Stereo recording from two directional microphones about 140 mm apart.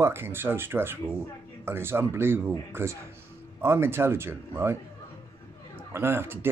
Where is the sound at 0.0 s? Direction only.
15° right (ahead or behind).